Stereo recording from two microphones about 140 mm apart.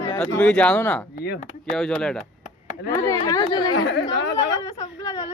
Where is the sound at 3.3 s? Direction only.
30° left (ahead or behind).